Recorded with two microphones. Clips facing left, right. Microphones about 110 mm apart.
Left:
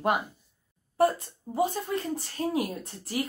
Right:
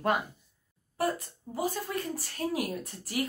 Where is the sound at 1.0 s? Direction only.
25° left (ahead or behind).